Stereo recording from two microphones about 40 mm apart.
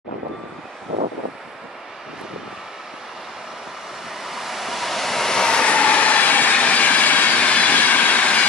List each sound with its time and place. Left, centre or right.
4.1 s vehicle: centre; by 6.5 s left
6.5 s train: left
7.3 s train: left